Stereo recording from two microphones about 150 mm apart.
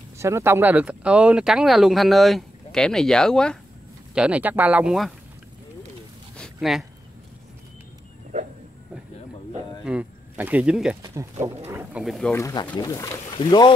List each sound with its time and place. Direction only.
0.2 s speech: 15° right (ahead or behind); by 3.5 s 5° left (ahead or behind)
4.1 s speech: 5° right (ahead or behind)
6.3 s a sound: centre (ahead or behind)
9.8 s speech: 10° right (ahead or behind)
11.0 s speech: 25° right (ahead or behind)
12.0 s speech: centre (ahead or behind)
12.3 s speech: 20° left (ahead or behind)